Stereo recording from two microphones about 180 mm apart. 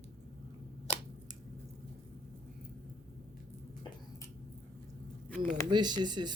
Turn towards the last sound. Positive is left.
turn(degrees=-25)  # may be behind; listen again after turning